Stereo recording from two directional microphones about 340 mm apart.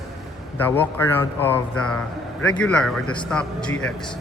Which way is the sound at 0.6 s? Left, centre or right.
Centre.